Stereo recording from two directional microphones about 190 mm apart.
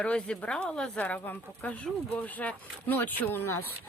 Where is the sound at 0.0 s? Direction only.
5° left (ahead or behind).